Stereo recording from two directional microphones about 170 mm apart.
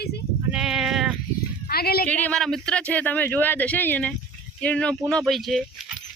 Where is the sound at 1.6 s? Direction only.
65° left (ahead or behind).